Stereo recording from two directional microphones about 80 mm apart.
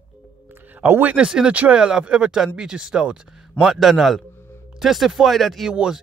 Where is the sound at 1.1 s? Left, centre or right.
Centre.